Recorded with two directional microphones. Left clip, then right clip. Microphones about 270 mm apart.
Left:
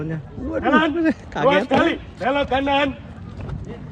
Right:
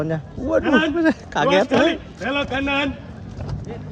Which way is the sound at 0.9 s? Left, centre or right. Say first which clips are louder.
Right 3 dB; centre.